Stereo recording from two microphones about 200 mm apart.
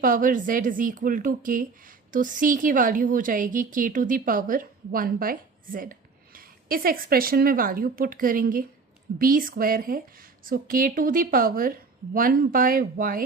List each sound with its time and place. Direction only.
0.0 s a woman's voice: 45° right (ahead or behind)